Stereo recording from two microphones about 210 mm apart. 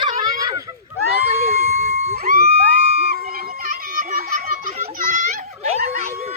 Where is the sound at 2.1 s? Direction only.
45° right (ahead or behind).